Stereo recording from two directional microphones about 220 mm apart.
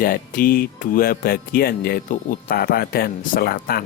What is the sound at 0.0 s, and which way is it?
Speech, 40° left (ahead or behind).